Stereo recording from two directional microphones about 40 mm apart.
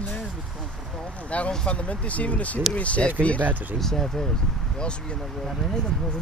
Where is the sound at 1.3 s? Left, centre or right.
Left.